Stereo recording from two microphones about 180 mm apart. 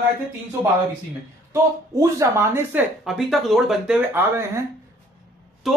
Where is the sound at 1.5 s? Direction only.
15° right (ahead or behind).